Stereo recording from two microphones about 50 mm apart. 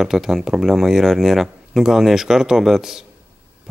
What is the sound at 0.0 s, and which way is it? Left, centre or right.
Speech, centre.